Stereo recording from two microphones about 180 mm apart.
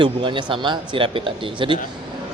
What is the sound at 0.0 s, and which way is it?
Speech, 25° right (ahead or behind).